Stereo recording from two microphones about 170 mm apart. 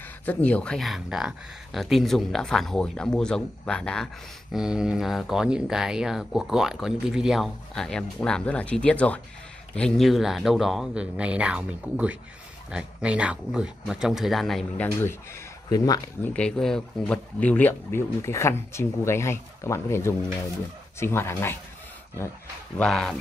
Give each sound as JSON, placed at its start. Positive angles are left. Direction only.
{"t": 0.2, "sound": "speech", "side_deg": 10}
{"t": 15.7, "sound": "speech", "side_deg": 20}
{"t": 16.3, "sound": "speech", "side_deg": 5}
{"t": 22.8, "sound": "speech", "side_deg": 5}